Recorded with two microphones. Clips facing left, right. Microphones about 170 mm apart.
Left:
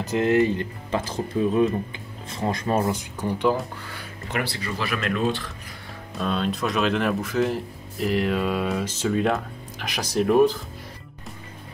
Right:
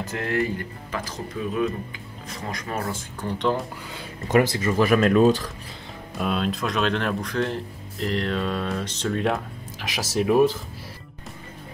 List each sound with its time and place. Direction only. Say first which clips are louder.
0.0 s speech: left 6 dB; 20° left (ahead or behind)
3.2 s speech: left 1 dB; 10° left (ahead or behind)
4.3 s speech: right 9 dB; 40° right (ahead or behind)
6.1 s speech: even; 5° right (ahead or behind)